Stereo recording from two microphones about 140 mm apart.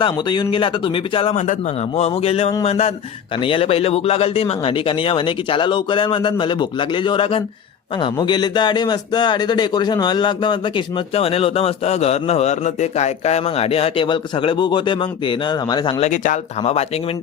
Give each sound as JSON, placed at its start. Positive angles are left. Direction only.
{"t": 0.0, "sound": "a man's voice", "side_deg": 35}
{"t": 16.0, "sound": "speech", "side_deg": 60}